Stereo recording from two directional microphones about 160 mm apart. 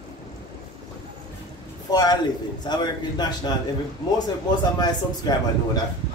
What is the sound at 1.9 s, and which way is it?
A man's voice, 25° left (ahead or behind).